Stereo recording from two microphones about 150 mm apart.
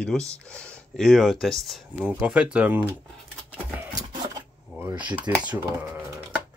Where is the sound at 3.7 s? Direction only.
25° right (ahead or behind).